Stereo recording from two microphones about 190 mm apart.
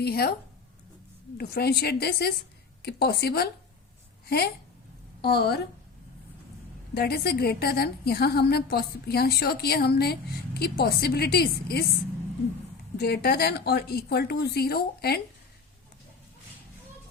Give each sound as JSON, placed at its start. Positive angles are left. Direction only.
{"t": 0.0, "sound": "a woman's voice", "side_deg": 55}
{"t": 1.4, "sound": "a woman's voice", "side_deg": 55}
{"t": 5.2, "sound": "a woman's voice", "side_deg": 55}
{"t": 6.9, "sound": "a woman's voice", "side_deg": 55}
{"t": 13.0, "sound": "a woman's voice", "side_deg": 55}